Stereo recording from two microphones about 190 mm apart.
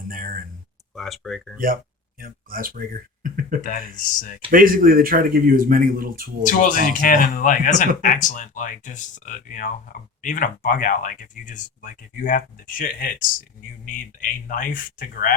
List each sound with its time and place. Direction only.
0.1 s a sound: 45° right (ahead or behind)
0.9 s speech: centre (ahead or behind)
1.5 s speech: 50° right (ahead or behind)
3.6 s speech: 45° left (ahead or behind)
4.5 s speech: 45° right (ahead or behind)
6.4 s speech: 45° left (ahead or behind)